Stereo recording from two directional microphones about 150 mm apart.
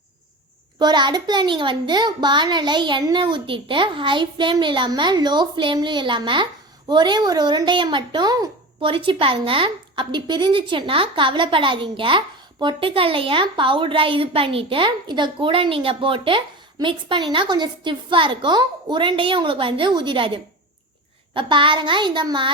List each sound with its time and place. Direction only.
0.8 s a child's voice: 30° right (ahead or behind)